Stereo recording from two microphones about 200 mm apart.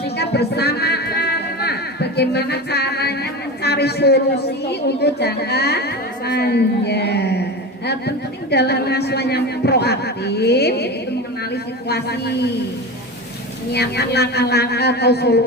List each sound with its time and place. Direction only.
0.2 s a sound: 55° left (ahead or behind)
3.6 s speech: 55° left (ahead or behind)
13.7 s speech: 55° left (ahead or behind)